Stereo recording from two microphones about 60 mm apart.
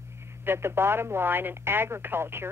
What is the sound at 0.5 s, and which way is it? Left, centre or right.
Speech, right.